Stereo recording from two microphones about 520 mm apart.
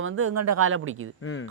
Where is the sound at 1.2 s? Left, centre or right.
Left.